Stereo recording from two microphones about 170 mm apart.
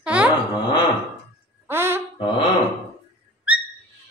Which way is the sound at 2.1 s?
30° left (ahead or behind).